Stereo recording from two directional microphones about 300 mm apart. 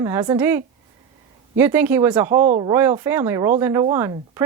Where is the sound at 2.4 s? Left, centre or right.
Right.